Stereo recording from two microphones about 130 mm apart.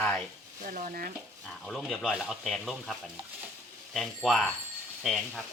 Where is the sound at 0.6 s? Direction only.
80° right.